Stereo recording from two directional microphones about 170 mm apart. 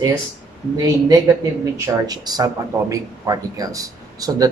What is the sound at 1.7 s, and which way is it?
A man's voice, 20° right (ahead or behind).